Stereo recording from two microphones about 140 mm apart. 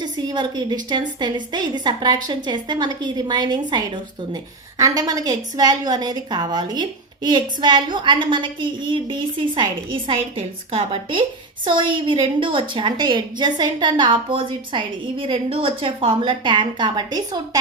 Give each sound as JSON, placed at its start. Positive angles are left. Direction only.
{"t": 0.0, "sound": "a woman's voice", "side_deg": -30}